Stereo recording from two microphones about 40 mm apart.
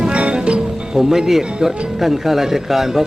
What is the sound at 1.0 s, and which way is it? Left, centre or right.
Speech, centre.